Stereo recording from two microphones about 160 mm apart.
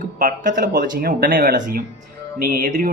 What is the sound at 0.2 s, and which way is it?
Speech, 60° right (ahead or behind).